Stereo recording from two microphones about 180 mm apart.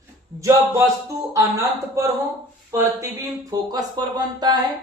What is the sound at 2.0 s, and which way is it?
A man's voice, 15° right (ahead or behind).